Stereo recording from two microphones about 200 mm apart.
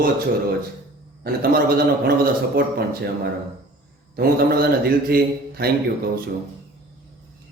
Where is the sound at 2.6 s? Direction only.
45° right (ahead or behind).